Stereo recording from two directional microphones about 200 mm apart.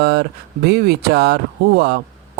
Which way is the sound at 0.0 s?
55° right (ahead or behind).